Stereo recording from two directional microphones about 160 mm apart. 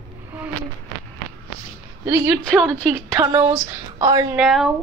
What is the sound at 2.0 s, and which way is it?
Speech, 10° right (ahead or behind).